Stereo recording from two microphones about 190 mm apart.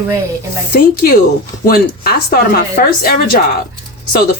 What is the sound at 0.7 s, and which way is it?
Speech, 50° left (ahead or behind).